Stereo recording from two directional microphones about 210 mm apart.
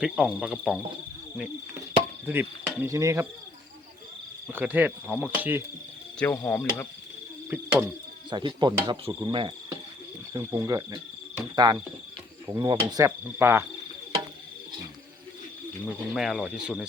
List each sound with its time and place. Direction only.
0.0 s speech: 5° right (ahead or behind)
2.2 s cricket: 10° right (ahead or behind)
4.5 s cricket: 5° right (ahead or behind)
6.1 s speech: 10° left (ahead or behind)
7.5 s cricket: 10° right (ahead or behind)
8.3 s cricket: 20° right (ahead or behind)
10.3 s speech: 15° right (ahead or behind)
12.5 s cricket: 20° right (ahead or behind)
15.9 s speech: centre (ahead or behind)